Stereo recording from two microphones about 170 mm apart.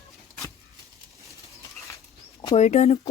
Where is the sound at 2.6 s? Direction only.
45° left (ahead or behind).